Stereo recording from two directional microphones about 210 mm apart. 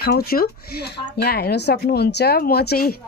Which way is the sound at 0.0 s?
50° left (ahead or behind).